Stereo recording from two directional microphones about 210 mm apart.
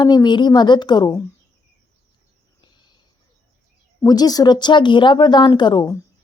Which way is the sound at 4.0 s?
20° left (ahead or behind).